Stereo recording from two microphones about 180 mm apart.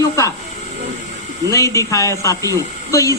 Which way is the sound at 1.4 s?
15° left (ahead or behind).